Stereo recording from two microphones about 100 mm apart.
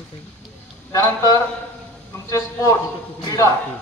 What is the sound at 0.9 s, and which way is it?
A man's voice, 35° left (ahead or behind).